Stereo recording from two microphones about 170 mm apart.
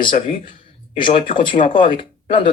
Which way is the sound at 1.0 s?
30° left (ahead or behind).